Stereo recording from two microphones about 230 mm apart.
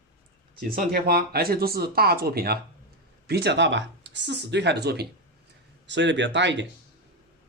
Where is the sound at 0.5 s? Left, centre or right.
Right.